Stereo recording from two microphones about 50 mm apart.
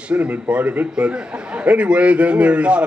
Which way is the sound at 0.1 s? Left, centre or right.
Right.